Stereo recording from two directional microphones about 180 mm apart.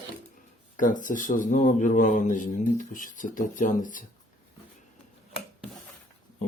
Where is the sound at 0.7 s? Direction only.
45° left (ahead or behind).